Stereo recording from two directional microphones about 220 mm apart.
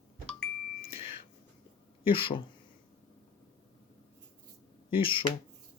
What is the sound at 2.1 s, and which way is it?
Speech, 25° left (ahead or behind).